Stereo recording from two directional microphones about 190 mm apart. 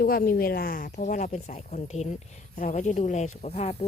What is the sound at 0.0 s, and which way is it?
Speech, 50° left (ahead or behind).